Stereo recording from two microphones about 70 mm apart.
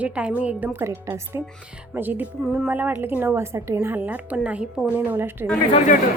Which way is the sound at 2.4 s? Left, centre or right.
Centre.